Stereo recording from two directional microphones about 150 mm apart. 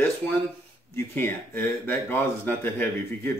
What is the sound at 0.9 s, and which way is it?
Speech, 15° left (ahead or behind).